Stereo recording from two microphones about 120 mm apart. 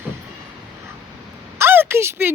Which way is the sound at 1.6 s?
20° right (ahead or behind).